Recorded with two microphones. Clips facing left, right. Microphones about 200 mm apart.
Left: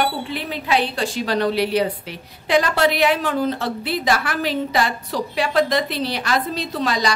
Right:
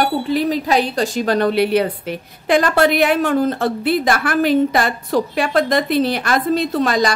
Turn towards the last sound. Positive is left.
turn(degrees=-50)  # may be behind; listen again after turning